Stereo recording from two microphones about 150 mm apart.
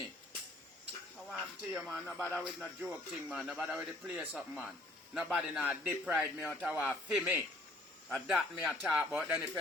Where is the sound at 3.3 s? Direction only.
10° right (ahead or behind).